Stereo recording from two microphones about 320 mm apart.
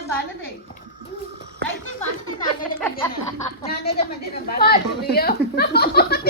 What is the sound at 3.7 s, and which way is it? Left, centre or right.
A woman's voice, left.